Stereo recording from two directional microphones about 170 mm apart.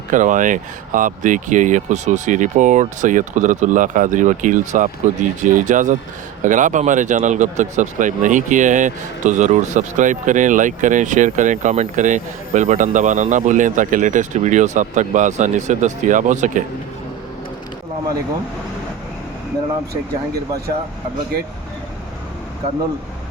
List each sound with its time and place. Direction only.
0.1 s speech: 50° right (ahead or behind)